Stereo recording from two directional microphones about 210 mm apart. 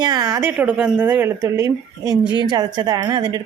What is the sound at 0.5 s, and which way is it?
A woman's voice, 5° right (ahead or behind).